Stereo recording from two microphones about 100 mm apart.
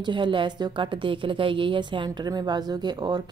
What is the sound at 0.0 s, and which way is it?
A woman's voice, 55° right (ahead or behind).